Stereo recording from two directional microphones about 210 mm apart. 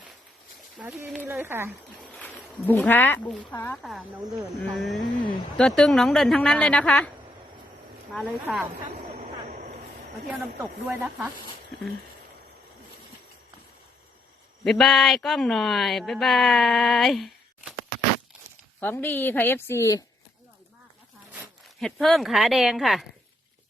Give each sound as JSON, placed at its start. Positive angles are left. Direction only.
{"t": 0.8, "sound": "speech", "side_deg": -5}
{"t": 2.1, "sound": "speech", "side_deg": 10}
{"t": 8.1, "sound": "speech", "side_deg": 0}
{"t": 9.2, "sound": "vehicle", "side_deg": -35}
{"t": 10.6, "sound": "speech", "side_deg": -5}
{"t": 14.6, "sound": "speech", "side_deg": 0}
{"t": 18.8, "sound": "a woman's voice", "side_deg": 10}
{"t": 21.8, "sound": "speech", "side_deg": 0}